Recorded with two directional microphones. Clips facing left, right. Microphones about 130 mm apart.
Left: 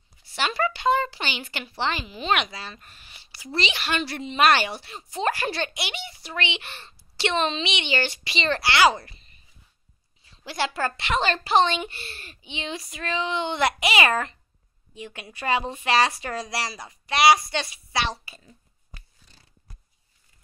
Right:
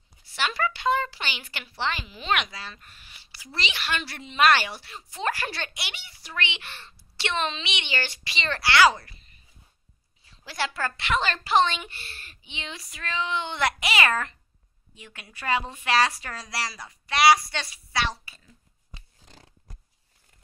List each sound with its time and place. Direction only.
0.4 s a woman's voice: 25° left (ahead or behind)
10.4 s a woman's voice: 20° left (ahead or behind)